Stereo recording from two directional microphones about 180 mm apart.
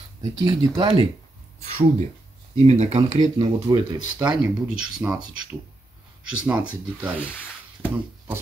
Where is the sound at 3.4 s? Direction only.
25° right (ahead or behind).